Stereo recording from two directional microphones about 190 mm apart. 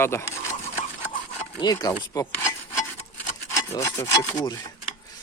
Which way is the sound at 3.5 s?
15° left (ahead or behind).